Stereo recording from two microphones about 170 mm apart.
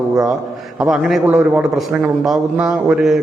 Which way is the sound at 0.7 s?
Centre (ahead or behind).